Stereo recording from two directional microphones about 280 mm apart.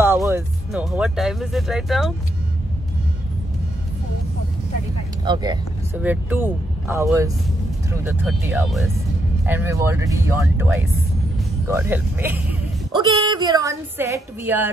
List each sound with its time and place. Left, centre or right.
0.0 s speech: centre
5.2 s a woman's voice: centre